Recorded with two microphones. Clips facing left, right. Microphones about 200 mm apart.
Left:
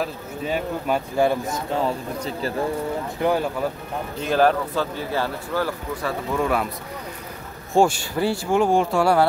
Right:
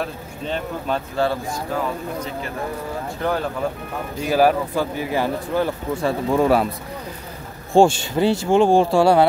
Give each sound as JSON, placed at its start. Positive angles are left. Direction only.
{"t": 0.0, "sound": "speech", "side_deg": 10}
{"t": 3.2, "sound": "speech", "side_deg": 15}
{"t": 4.2, "sound": "speech", "side_deg": -10}
{"t": 7.7, "sound": "speech", "side_deg": -25}